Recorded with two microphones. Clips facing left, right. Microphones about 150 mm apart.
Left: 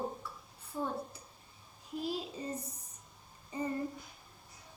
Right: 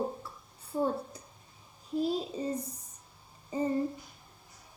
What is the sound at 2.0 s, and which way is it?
Child singing, 35° right (ahead or behind).